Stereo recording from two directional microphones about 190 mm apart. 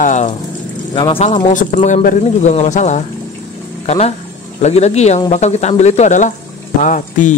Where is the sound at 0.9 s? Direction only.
25° left (ahead or behind).